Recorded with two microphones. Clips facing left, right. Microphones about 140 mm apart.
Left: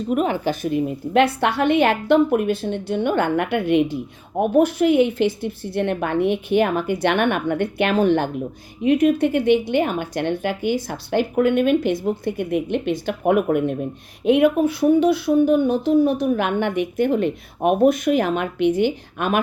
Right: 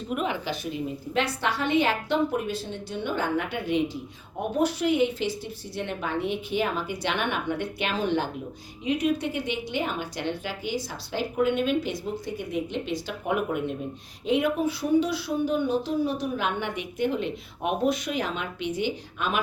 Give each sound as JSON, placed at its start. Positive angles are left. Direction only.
{"t": 0.1, "sound": "speech", "side_deg": 45}